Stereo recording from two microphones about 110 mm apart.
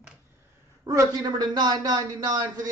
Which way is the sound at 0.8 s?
35° right (ahead or behind).